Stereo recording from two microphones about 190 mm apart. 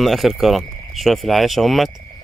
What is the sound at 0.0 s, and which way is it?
Speech, centre (ahead or behind).